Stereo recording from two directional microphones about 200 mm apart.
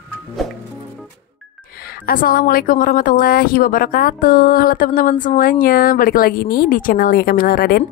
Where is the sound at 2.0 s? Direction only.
45° left (ahead or behind).